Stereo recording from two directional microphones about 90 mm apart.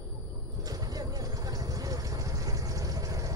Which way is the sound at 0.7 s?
45° right (ahead or behind).